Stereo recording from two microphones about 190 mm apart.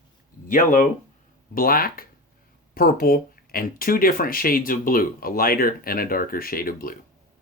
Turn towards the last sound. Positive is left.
turn(degrees=50)  # may be behind; listen again after turning